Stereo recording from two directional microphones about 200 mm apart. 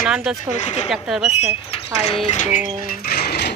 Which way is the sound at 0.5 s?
30° left (ahead or behind).